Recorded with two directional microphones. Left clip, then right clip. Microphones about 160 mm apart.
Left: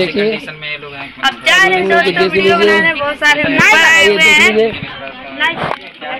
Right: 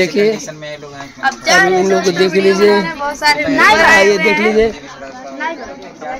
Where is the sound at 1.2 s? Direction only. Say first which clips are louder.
Left 1 dB; 5° left (ahead or behind).